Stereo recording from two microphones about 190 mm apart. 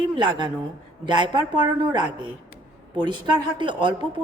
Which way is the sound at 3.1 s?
25° right (ahead or behind).